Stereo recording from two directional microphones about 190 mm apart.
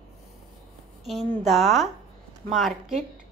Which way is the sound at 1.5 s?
Centre (ahead or behind).